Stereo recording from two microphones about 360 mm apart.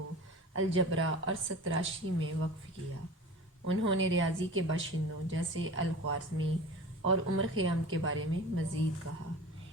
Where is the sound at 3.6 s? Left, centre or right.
Right.